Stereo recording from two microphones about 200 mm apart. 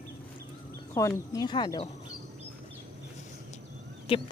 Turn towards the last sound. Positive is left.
turn(degrees=25)  # may be behind; listen again after turning